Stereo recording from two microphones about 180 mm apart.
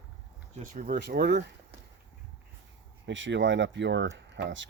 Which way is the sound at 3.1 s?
90° right.